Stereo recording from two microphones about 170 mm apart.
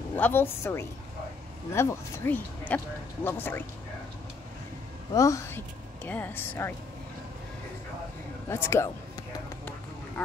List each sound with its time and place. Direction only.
0.1 s speech: 10° left (ahead or behind)
5.1 s a woman's voice: 20° left (ahead or behind)
8.5 s speech: 15° left (ahead or behind)